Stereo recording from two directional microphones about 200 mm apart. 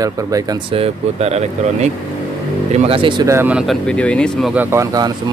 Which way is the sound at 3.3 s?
10° right (ahead or behind).